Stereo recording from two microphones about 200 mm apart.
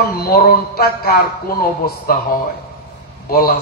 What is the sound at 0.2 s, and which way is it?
Speech, 50° left (ahead or behind).